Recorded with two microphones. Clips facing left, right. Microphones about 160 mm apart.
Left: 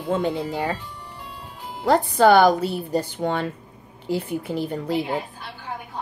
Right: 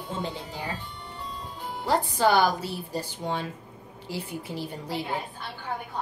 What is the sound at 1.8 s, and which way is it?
Speech, 60° left (ahead or behind).